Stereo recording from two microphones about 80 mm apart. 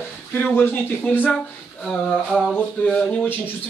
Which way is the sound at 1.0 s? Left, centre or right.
Centre.